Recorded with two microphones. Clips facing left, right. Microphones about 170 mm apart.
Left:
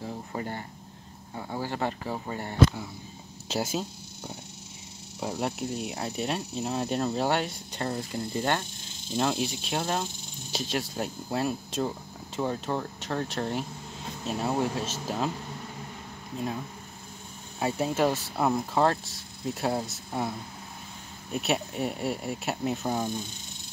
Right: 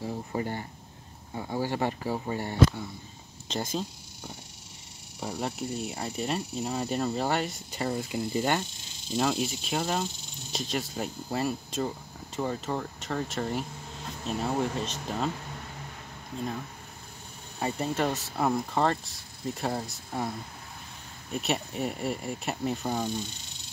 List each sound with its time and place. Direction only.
0.0 s speech: 15° right (ahead or behind)
3.4 s speech: 5° left (ahead or behind)
5.4 s speech: centre (ahead or behind)
17.6 s speech: 5° left (ahead or behind)